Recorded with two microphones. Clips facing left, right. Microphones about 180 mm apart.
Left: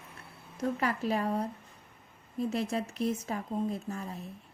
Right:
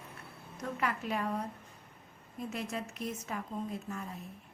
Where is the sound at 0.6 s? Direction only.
35° left (ahead or behind).